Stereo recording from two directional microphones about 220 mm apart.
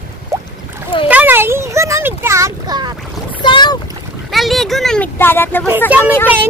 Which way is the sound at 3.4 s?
20° left (ahead or behind).